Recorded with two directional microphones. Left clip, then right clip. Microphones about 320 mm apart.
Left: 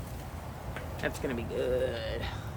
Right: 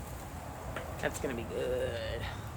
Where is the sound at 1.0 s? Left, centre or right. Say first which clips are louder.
Left 2 dB; centre.